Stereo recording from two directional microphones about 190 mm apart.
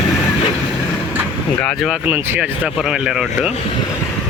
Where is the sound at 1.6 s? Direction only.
Centre (ahead or behind).